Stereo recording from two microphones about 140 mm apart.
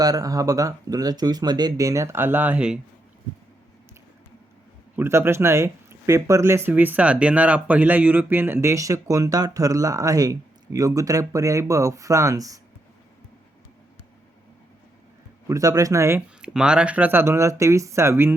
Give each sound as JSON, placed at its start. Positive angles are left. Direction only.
{"t": 0.0, "sound": "speech", "side_deg": -25}
{"t": 4.9, "sound": "speech", "side_deg": -15}
{"t": 15.4, "sound": "speech", "side_deg": -25}
{"t": 16.4, "sound": "speech", "side_deg": -5}